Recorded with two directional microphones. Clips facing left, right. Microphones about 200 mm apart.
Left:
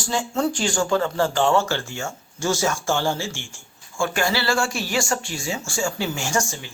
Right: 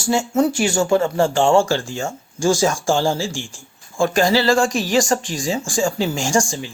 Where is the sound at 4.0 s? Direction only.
35° right (ahead or behind).